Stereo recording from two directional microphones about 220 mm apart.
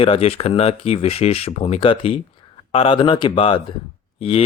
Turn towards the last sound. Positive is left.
turn(degrees=25)  # may be behind; listen again after turning